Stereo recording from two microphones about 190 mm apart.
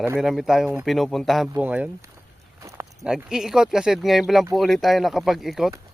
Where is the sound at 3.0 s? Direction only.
5° right (ahead or behind).